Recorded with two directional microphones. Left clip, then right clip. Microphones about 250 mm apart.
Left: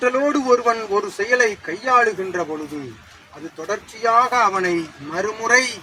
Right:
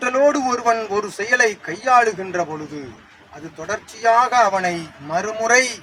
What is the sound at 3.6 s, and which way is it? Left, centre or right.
A man's voice, right.